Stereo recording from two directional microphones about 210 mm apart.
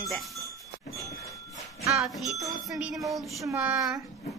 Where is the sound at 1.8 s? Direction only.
15° right (ahead or behind).